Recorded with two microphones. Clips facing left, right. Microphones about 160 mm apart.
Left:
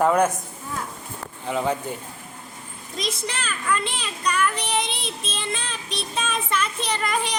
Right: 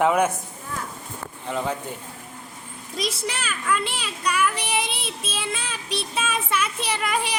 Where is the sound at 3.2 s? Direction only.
5° right (ahead or behind).